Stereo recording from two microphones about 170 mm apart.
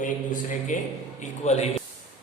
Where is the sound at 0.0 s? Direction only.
50° left (ahead or behind).